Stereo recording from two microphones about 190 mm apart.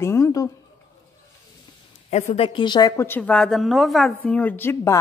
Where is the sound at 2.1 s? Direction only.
35° left (ahead or behind).